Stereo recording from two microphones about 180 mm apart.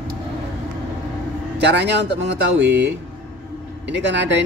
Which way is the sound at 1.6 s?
70° right (ahead or behind).